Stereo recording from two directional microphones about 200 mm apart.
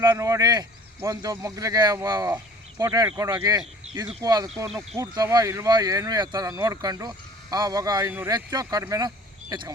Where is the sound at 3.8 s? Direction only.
30° right (ahead or behind).